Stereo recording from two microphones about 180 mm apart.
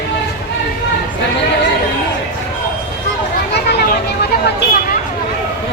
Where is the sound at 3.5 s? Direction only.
65° left (ahead or behind).